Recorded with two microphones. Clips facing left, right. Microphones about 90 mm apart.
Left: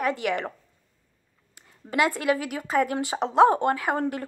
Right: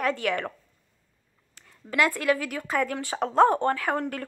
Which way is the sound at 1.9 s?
15° left (ahead or behind).